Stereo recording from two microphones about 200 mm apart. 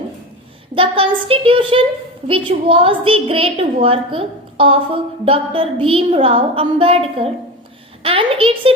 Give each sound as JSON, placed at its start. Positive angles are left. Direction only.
{"t": 0.8, "sound": "a woman's voice", "side_deg": -25}